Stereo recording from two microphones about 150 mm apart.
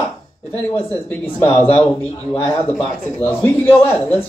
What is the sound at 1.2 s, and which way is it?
Speech, 15° left (ahead or behind).